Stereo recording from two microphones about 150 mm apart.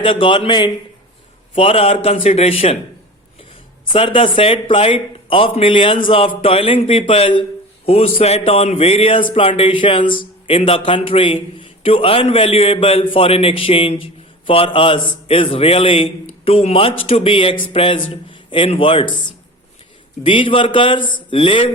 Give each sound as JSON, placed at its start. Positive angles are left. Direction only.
{"t": 0.0, "sound": "a man's voice", "side_deg": 35}
{"t": 3.9, "sound": "a man's voice", "side_deg": 40}
{"t": 20.2, "sound": "a man's voice", "side_deg": 35}